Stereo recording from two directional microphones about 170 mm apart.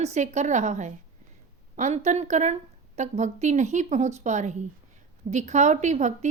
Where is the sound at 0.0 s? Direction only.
45° right (ahead or behind).